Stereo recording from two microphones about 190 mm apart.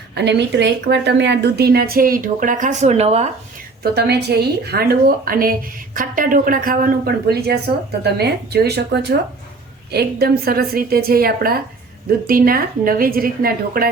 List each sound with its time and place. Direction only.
0.1 s speech: 65° right (ahead or behind); by 3.2 s 35° right (ahead or behind)
3.9 s a woman's voice: 60° right (ahead or behind)